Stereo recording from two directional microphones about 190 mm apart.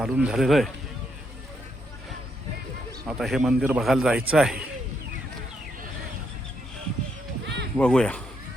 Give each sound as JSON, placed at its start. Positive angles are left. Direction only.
{"t": 0.0, "sound": "a man's voice", "side_deg": -5}
{"t": 3.1, "sound": "a man's voice", "side_deg": 0}
{"t": 7.4, "sound": "a sound", "side_deg": -65}
{"t": 7.8, "sound": "a man's voice", "side_deg": 5}